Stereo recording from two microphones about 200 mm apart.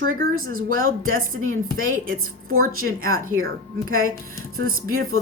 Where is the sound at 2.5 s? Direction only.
90° right.